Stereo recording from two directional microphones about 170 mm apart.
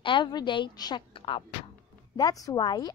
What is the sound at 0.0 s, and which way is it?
A woman's voice, 30° left (ahead or behind).